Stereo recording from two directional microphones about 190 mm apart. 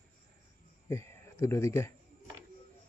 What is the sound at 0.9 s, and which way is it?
Speech, 15° left (ahead or behind).